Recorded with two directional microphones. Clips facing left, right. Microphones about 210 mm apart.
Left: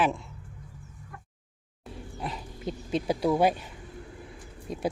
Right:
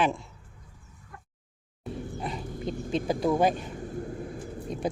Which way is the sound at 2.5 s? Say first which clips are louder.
Even; 50° right (ahead or behind).